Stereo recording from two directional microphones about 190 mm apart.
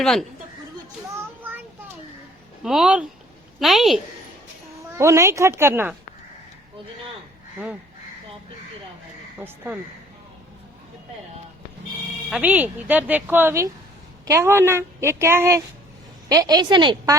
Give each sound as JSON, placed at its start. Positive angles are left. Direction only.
{"t": 0.0, "sound": "speech", "side_deg": 0}
{"t": 1.1, "sound": "a sound", "side_deg": -10}
{"t": 2.6, "sound": "speech", "side_deg": -5}
{"t": 4.9, "sound": "a woman's voice", "side_deg": -15}
{"t": 12.3, "sound": "a woman's voice", "side_deg": -10}